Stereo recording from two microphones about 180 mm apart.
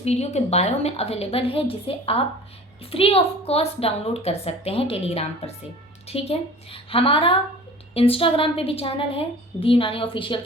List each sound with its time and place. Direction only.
0.0 s a woman's voice: 35° left (ahead or behind)